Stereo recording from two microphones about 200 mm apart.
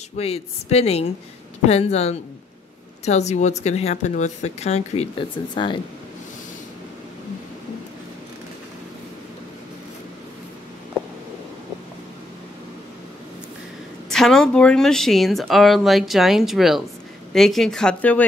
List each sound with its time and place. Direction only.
0.2 s speech: 30° left (ahead or behind)
14.0 s a woman's voice: centre (ahead or behind)